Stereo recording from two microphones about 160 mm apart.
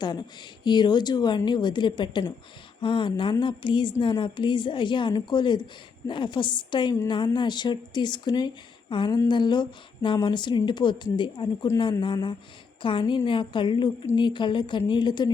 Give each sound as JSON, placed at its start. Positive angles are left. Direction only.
{"t": 0.0, "sound": "a woman's voice", "side_deg": 25}